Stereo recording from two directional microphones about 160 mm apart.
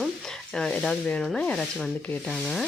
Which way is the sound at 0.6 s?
5° left (ahead or behind).